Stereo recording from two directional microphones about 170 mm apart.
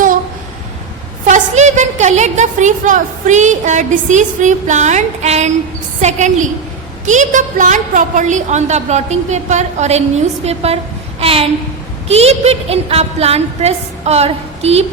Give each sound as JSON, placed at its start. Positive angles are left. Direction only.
{"t": 1.3, "sound": "a woman's voice", "side_deg": -45}
{"t": 11.2, "sound": "a sound", "side_deg": -35}
{"t": 12.0, "sound": "a woman's voice", "side_deg": -40}